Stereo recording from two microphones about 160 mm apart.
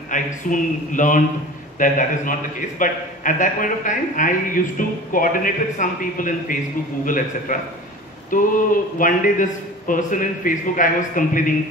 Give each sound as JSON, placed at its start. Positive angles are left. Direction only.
{"t": 0.1, "sound": "a man's voice", "side_deg": 55}